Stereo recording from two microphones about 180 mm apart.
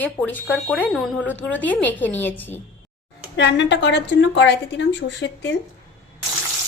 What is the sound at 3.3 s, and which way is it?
A woman's voice, 80° left.